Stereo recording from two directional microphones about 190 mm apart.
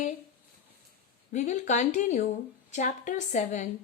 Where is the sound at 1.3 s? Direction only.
40° left (ahead or behind).